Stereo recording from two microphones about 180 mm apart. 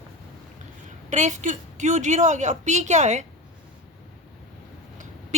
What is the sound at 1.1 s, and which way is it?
A woman's voice, 40° right (ahead or behind).